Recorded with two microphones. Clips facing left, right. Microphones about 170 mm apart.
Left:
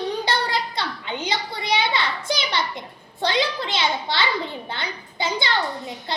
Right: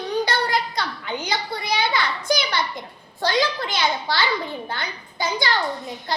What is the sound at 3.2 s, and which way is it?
A child's voice, 25° left (ahead or behind).